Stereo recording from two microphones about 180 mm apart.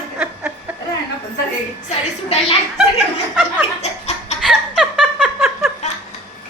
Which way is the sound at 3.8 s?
35° left (ahead or behind).